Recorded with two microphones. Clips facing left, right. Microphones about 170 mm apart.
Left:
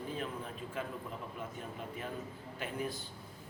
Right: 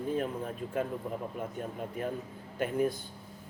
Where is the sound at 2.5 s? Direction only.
50° right (ahead or behind).